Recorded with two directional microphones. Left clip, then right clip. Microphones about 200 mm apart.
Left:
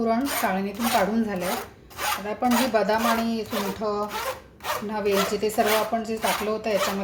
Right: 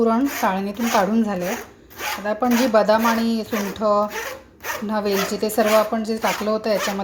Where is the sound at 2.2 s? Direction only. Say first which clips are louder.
Right 6 dB; 30° right (ahead or behind).